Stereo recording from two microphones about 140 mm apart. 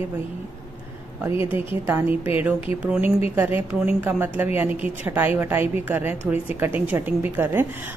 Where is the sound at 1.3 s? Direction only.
40° left (ahead or behind).